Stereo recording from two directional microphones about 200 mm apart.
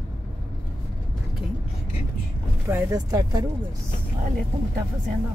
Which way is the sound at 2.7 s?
15° right (ahead or behind).